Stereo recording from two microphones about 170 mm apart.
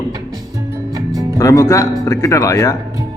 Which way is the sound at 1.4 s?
20° left (ahead or behind).